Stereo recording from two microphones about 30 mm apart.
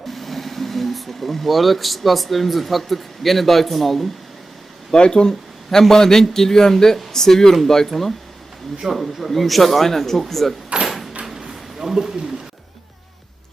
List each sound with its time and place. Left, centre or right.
0.1 s speech: centre
4.9 s speech: left
5.8 s a man's voice: centre
8.8 s speech: right
9.3 s a man's voice: centre
10.8 s door: centre
11.3 s a sound: centre